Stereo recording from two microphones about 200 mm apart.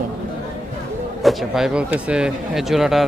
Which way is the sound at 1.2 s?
Centre (ahead or behind).